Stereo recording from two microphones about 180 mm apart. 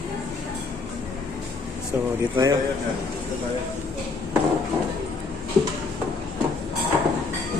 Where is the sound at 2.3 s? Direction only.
20° right (ahead or behind).